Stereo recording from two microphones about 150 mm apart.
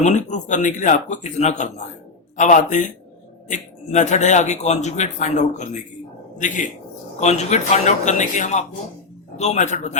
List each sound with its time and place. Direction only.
0.0 s speech: 55° left (ahead or behind)